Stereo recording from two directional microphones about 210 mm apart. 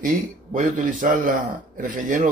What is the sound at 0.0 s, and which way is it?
Speech, 40° right (ahead or behind).